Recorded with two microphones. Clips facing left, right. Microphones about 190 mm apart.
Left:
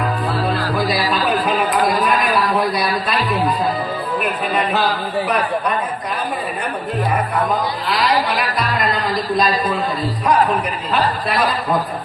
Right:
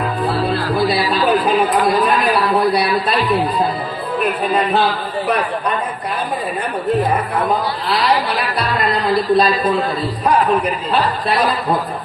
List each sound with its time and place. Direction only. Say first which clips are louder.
0.3 s music: right 2 dB; 30° right (ahead or behind)
1.2 s a sound: right 4 dB; 35° right (ahead or behind)
4.2 s speech: right 5 dB; 30° right (ahead or behind)
9.0 s speech: right 7 dB; 30° right (ahead or behind)